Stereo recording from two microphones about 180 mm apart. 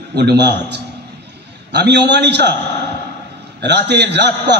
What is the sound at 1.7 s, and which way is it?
Speech, 70° right (ahead or behind).